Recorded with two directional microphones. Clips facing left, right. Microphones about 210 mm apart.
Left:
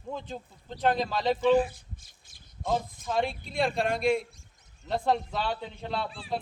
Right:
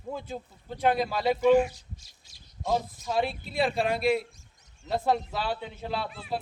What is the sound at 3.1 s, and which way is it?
A man's voice, 5° right (ahead or behind).